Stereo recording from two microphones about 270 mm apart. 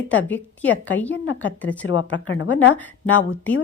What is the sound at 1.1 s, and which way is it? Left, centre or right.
A woman's voice, left.